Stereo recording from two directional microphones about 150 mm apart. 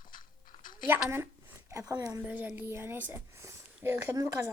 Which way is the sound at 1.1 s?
15° right (ahead or behind).